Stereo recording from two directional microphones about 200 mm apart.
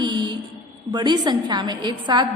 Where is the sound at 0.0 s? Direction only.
20° right (ahead or behind).